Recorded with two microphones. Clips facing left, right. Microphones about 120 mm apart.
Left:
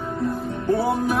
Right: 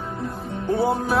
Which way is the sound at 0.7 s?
25° right (ahead or behind).